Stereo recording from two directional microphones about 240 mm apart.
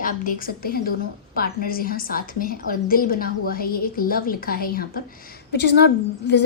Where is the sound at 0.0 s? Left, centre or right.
Left.